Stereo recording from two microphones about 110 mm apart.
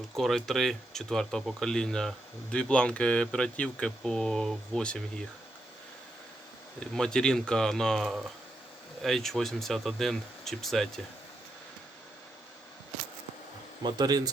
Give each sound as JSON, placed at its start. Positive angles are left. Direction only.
{"t": 0.2, "sound": "speech", "side_deg": 0}
{"t": 6.7, "sound": "speech", "side_deg": 5}
{"t": 13.8, "sound": "speech", "side_deg": -40}